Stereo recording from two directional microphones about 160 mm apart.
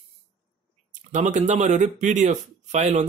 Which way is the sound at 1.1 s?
50° right (ahead or behind).